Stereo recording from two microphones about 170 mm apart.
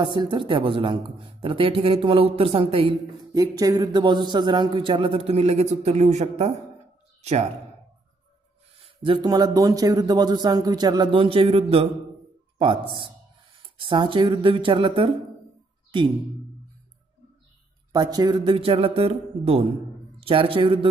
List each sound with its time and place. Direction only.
0.0 s a woman's voice: 25° right (ahead or behind)
3.3 s a man's voice: 20° right (ahead or behind); by 6.5 s 40° right (ahead or behind)
8.8 s a man's voice: 30° right (ahead or behind)
17.9 s a man's voice: 20° right (ahead or behind)
18.5 s a woman's voice: 35° right (ahead or behind)